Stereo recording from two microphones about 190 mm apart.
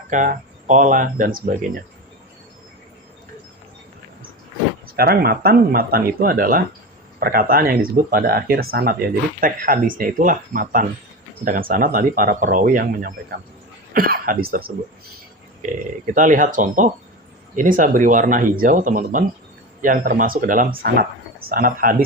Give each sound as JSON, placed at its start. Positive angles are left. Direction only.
{"t": 0.1, "sound": "speech", "side_deg": -40}
{"t": 4.9, "sound": "speech", "side_deg": -55}
{"t": 16.1, "sound": "speech", "side_deg": -45}